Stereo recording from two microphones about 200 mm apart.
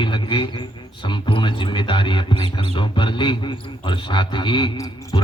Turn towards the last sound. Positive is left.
turn(degrees=15)  # may be behind; listen again after turning